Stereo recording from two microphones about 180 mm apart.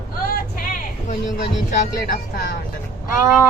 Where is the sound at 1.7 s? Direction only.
50° left (ahead or behind).